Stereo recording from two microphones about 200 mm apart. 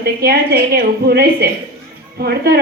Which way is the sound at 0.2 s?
50° right (ahead or behind).